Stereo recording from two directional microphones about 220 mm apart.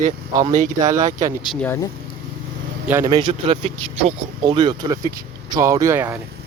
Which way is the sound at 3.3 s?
30° right (ahead or behind).